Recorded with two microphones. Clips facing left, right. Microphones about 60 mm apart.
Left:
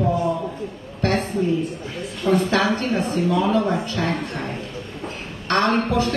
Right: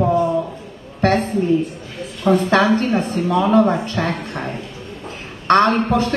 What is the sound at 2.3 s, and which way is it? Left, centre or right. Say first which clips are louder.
A woman's voice: right 4 dB; right.